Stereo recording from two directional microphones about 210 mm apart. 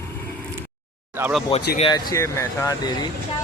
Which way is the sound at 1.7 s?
25° left (ahead or behind).